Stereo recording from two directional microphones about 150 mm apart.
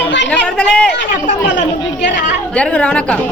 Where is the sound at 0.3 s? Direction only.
10° left (ahead or behind).